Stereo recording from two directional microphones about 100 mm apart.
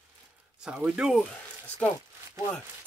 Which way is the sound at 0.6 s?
10° right (ahead or behind).